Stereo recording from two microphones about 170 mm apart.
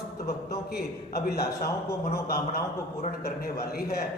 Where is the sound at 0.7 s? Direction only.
65° left (ahead or behind).